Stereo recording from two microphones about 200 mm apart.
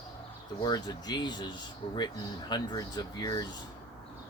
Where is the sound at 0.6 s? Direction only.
20° left (ahead or behind).